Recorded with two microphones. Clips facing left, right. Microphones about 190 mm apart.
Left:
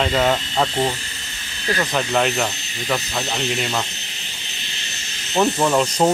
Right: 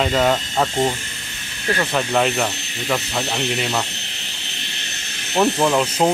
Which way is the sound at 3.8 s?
70° right (ahead or behind).